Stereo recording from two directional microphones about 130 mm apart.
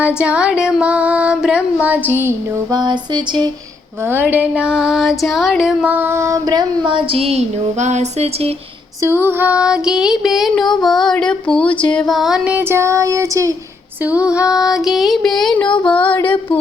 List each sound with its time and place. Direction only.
0.2 s music: 10° right (ahead or behind)
2.6 s music: 35° right (ahead or behind)
4.1 s music: 15° right (ahead or behind); by 8.5 s 50° right (ahead or behind)
9.0 s a sound: 20° right (ahead or behind); by 12.5 s 5° right (ahead or behind)
12.5 s child singing: 20° right (ahead or behind)
14.0 s a sound: 10° right (ahead or behind)
15.8 s female singing: 10° left (ahead or behind)